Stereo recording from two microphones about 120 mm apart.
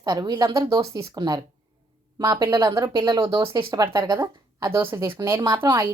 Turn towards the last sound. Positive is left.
turn(degrees=-30)  # may be behind; listen again after turning